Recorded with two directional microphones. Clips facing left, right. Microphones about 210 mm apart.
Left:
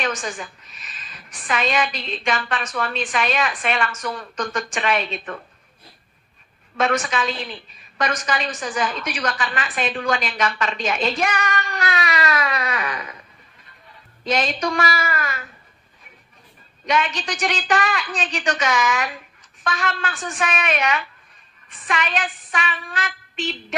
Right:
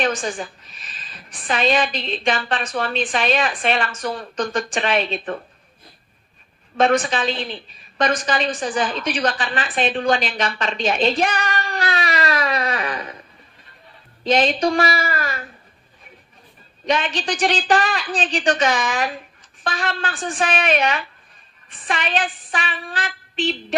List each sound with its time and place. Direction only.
0.0 s a woman's voice: 30° right (ahead or behind)
6.8 s a woman's voice: 30° right (ahead or behind)
14.2 s a woman's voice: 30° right (ahead or behind)
16.8 s a woman's voice: 30° right (ahead or behind)